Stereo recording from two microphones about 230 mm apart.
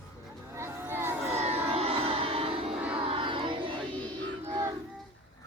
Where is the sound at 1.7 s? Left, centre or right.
Right.